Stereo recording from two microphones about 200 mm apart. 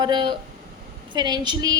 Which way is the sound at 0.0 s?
25° right (ahead or behind).